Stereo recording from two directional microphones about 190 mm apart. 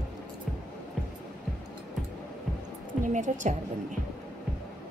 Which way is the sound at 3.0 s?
40° right (ahead or behind).